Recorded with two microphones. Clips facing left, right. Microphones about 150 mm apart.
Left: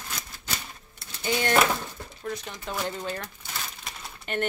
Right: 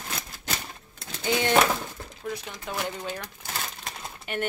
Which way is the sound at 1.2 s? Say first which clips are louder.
Right 1 dB; 20° right (ahead or behind).